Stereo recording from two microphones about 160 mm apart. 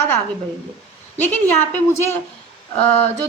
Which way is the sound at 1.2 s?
10° left (ahead or behind).